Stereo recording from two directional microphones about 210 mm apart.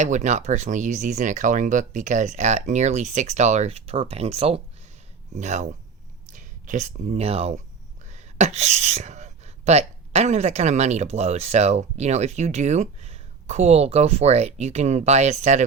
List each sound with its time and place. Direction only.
0.0 s speech: 35° right (ahead or behind)